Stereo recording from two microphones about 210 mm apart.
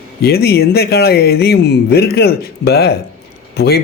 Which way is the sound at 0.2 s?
50° left (ahead or behind).